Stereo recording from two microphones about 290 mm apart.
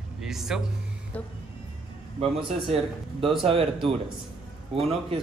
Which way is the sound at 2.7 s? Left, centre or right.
Centre.